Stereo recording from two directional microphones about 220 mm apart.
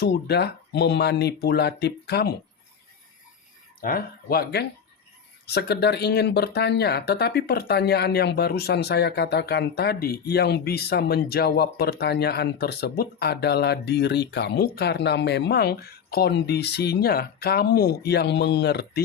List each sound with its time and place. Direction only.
0.0 s speech: 50° left (ahead or behind)
3.8 s speech: 40° left (ahead or behind)